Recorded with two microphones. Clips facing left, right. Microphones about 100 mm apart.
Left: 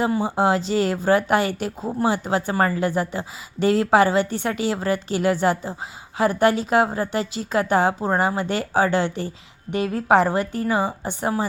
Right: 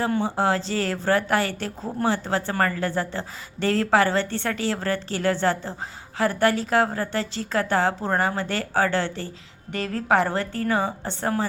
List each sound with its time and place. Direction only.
0.0 s speech: 10° left (ahead or behind)